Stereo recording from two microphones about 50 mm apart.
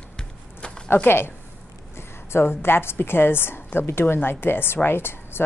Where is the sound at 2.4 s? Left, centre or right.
Left.